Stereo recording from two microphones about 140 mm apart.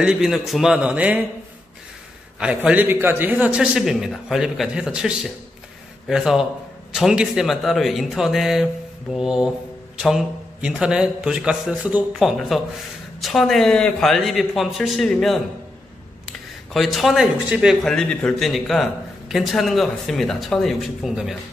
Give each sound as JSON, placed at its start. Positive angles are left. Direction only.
{"t": 0.0, "sound": "speech", "side_deg": -5}
{"t": 2.4, "sound": "a man's voice", "side_deg": -10}
{"t": 16.7, "sound": "speech", "side_deg": 0}